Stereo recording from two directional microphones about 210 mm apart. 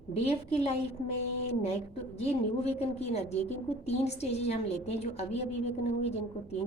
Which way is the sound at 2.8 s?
30° left (ahead or behind).